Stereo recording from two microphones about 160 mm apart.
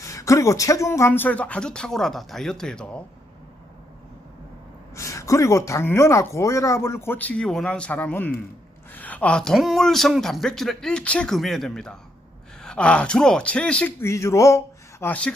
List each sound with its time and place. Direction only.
0.0 s speech: 20° left (ahead or behind)
4.9 s speech: 20° left (ahead or behind)